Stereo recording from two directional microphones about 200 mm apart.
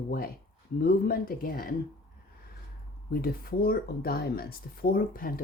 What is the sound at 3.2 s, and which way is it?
Speech, 45° left (ahead or behind).